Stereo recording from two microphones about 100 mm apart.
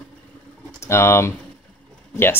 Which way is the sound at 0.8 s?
25° left (ahead or behind).